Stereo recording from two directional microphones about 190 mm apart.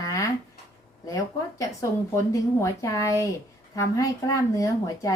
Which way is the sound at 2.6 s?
15° left (ahead or behind).